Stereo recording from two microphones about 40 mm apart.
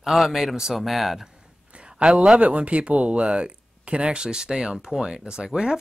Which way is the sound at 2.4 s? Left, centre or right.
Right.